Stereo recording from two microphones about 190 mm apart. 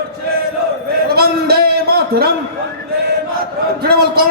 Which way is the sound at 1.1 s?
55° right (ahead or behind).